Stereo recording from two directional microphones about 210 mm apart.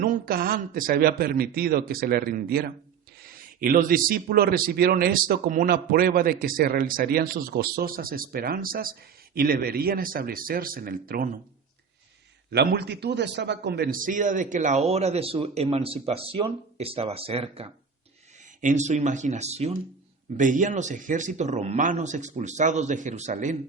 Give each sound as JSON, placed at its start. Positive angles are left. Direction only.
{"t": 0.0, "sound": "speech", "side_deg": -45}
{"t": 12.5, "sound": "a man's voice", "side_deg": -50}